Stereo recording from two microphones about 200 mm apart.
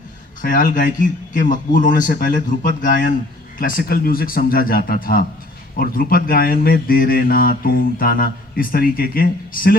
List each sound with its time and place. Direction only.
0.4 s speech: 45° left (ahead or behind)